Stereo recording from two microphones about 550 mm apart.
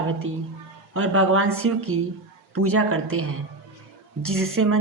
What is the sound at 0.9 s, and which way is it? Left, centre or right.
A woman's voice, right.